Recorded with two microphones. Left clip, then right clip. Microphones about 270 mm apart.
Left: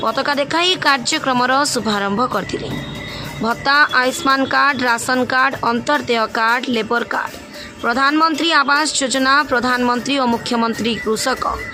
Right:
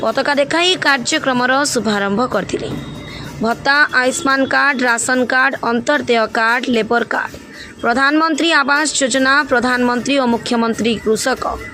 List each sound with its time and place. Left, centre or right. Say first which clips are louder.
0.0 s speech: right 3 dB; centre